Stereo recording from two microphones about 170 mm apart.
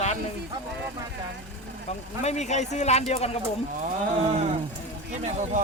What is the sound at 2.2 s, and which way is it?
Speech, 40° left (ahead or behind).